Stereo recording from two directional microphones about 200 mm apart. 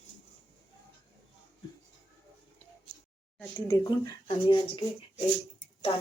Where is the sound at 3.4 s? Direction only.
15° left (ahead or behind).